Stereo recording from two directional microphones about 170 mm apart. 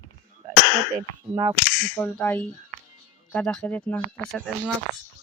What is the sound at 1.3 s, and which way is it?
Speech, 20° right (ahead or behind).